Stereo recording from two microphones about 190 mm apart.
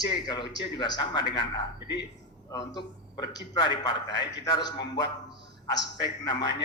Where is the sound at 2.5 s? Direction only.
20° left (ahead or behind).